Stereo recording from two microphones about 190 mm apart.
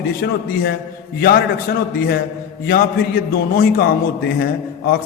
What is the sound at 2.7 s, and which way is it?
A man's voice, 50° left (ahead or behind).